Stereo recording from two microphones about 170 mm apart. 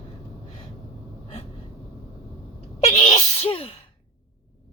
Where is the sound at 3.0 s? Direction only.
40° left (ahead or behind).